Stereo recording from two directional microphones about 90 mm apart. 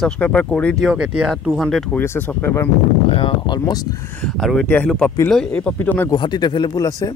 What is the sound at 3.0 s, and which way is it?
Speech, 75° left (ahead or behind).